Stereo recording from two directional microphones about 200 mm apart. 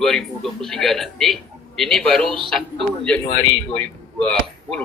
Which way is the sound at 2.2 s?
25° right (ahead or behind).